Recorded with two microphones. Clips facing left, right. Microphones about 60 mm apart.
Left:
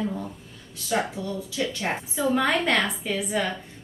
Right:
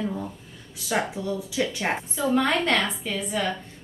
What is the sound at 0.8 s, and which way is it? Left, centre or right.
Speech, centre.